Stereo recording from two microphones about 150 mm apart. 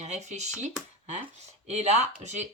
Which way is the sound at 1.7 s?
50° right (ahead or behind).